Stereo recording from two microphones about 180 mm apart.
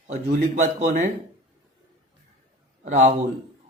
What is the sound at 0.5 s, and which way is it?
Speech, 40° right (ahead or behind).